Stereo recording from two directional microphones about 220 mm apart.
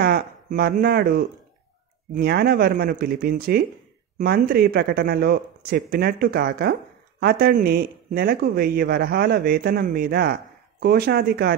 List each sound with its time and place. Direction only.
0.0 s speech: 45° right (ahead or behind)